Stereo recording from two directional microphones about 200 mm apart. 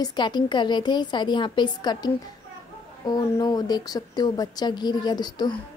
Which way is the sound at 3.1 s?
20° left (ahead or behind).